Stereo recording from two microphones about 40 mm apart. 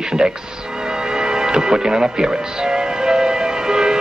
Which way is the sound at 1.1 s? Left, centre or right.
Centre.